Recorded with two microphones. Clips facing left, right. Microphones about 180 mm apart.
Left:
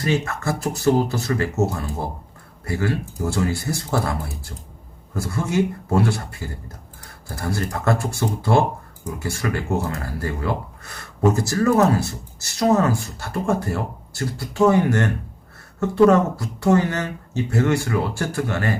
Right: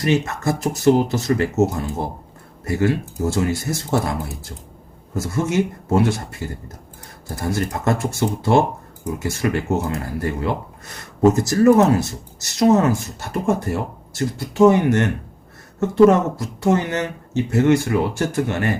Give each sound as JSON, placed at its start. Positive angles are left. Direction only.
{"t": 0.1, "sound": "speech", "side_deg": -20}
{"t": 2.7, "sound": "speech", "side_deg": -20}
{"t": 5.1, "sound": "speech", "side_deg": -20}